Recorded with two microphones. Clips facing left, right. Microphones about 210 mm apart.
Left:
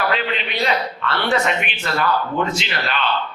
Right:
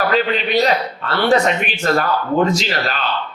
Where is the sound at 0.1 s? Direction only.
40° right (ahead or behind).